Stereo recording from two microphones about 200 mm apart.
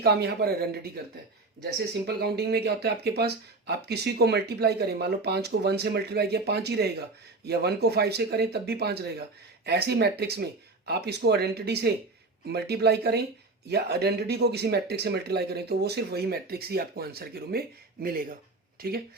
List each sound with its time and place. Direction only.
0.0 s speech: 55° right (ahead or behind)
2.0 s speech: 55° right (ahead or behind)